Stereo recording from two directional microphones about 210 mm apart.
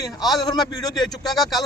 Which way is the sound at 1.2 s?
Centre (ahead or behind).